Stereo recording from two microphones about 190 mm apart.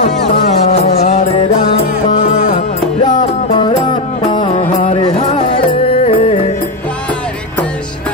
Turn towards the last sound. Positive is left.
turn(degrees=35)  # may be behind; listen again after turning